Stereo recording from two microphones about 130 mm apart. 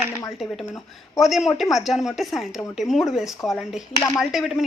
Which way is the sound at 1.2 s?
Centre (ahead or behind).